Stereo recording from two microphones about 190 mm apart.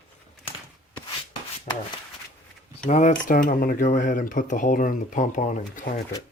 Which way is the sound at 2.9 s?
40° left (ahead or behind).